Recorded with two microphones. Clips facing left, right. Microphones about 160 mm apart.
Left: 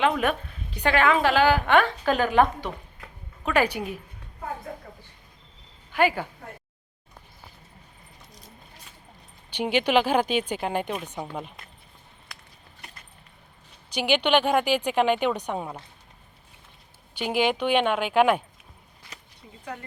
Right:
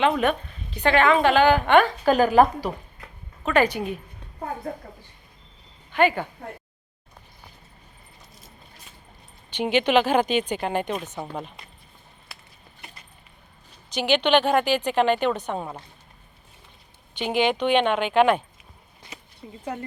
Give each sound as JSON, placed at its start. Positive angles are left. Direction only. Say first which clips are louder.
{"t": 0.0, "sound": "a woman's voice", "louder": "right 2 dB", "side_deg": 5}
{"t": 2.0, "sound": "a woman's voice", "louder": "right 4 dB", "side_deg": -40}
{"t": 3.4, "sound": "speech", "louder": "right 3 dB", "side_deg": 10}
{"t": 5.9, "sound": "speech", "louder": "right 2 dB", "side_deg": 5}
{"t": 9.5, "sound": "a woman's voice", "louder": "right 2 dB", "side_deg": 10}
{"t": 13.9, "sound": "speech", "louder": "right 2 dB", "side_deg": 10}
{"t": 17.2, "sound": "speech", "louder": "right 2 dB", "side_deg": 10}
{"t": 19.4, "sound": "speech", "louder": "right 9 dB", "side_deg": -25}